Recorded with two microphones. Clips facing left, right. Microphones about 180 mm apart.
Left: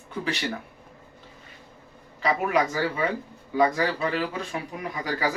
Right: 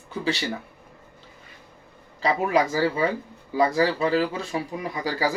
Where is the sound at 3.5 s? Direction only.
30° right (ahead or behind).